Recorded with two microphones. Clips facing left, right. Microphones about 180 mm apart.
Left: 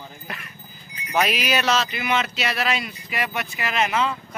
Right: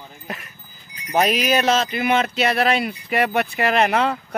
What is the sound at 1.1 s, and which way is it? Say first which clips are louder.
Speech: right 4 dB; 45° right (ahead or behind).